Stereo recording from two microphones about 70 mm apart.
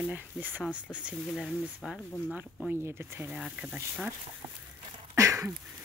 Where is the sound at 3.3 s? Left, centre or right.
Centre.